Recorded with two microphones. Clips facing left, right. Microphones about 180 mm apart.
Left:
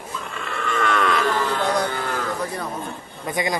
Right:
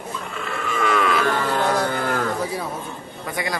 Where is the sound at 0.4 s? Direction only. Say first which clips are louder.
Even; 5° right (ahead or behind).